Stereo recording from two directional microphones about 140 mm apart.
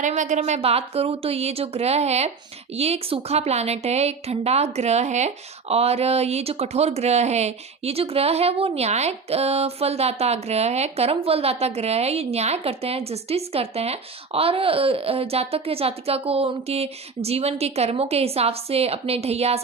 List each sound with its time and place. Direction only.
0.0 s a woman's voice: 60° right (ahead or behind)